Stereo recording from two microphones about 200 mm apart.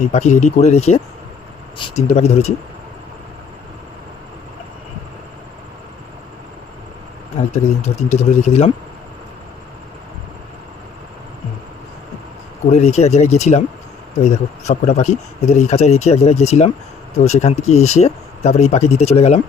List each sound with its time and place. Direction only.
0.1 s speech: 35° left (ahead or behind)
7.5 s speech: 35° left (ahead or behind)
12.7 s speech: 35° left (ahead or behind)